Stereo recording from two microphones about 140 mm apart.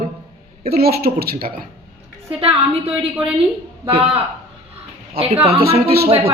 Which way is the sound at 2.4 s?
40° right (ahead or behind).